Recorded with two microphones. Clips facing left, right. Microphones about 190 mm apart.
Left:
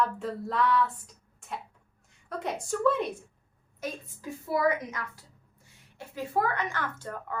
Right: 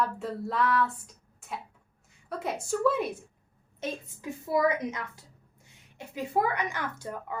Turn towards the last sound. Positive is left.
turn(degrees=-10)  # may be behind; listen again after turning